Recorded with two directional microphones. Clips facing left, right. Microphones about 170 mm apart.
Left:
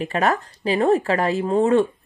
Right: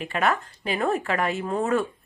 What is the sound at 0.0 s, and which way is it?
Speech, 40° left (ahead or behind).